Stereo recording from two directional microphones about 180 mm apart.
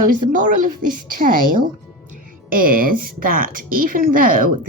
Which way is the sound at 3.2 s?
50° right (ahead or behind).